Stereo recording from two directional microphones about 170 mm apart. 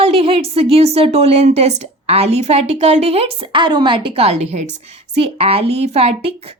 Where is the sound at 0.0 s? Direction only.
35° right (ahead or behind).